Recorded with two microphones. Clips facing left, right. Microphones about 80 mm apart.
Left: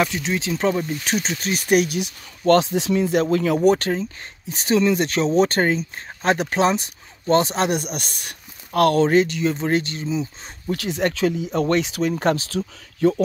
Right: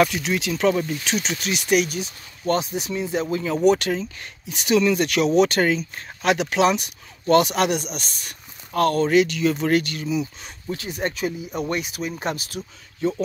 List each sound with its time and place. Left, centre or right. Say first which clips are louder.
0.0 s speech: right 2 dB; left
2.0 s speech: left 4 dB; left
3.6 s speech: left 1 dB; left
7.7 s speech: left 2 dB; left
9.1 s speech: even; left
10.7 s speech: left 4 dB; left
12.1 s speech: left 7 dB; left